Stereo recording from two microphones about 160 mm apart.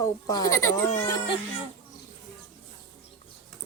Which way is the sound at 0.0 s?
25° left (ahead or behind).